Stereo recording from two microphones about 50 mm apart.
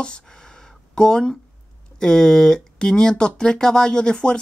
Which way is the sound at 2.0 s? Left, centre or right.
Centre.